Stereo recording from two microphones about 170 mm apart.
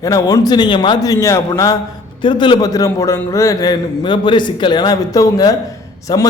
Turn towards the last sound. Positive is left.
turn(degrees=25)  # may be behind; listen again after turning